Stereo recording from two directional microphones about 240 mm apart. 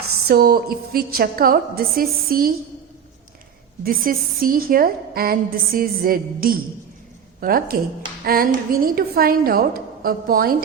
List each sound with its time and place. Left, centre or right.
0.3 s a woman's voice: right
3.8 s a woman's voice: right